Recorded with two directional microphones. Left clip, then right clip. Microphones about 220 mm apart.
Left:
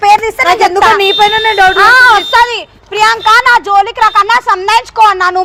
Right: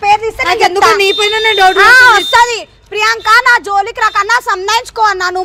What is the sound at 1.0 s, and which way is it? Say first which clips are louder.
Speech: left 3 dB; 55° right (ahead or behind).